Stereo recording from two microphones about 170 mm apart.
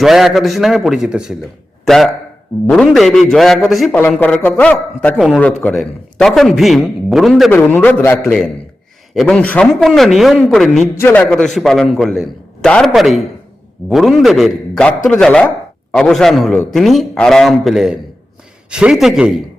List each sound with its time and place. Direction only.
0.0 s a man's voice: centre (ahead or behind)
2.6 s a man's voice: 5° left (ahead or behind)
5.1 s a man's voice: centre (ahead or behind)
7.5 s a man's voice: 10° left (ahead or behind)